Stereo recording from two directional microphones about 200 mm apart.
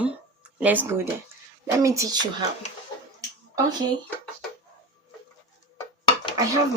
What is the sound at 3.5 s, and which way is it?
Speech, 20° right (ahead or behind).